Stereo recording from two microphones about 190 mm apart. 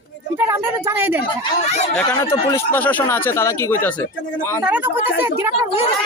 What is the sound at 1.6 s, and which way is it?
Speech, 35° left (ahead or behind).